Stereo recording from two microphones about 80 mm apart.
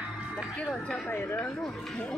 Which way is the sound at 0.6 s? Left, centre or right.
Centre.